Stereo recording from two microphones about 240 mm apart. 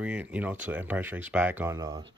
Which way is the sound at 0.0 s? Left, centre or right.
Centre.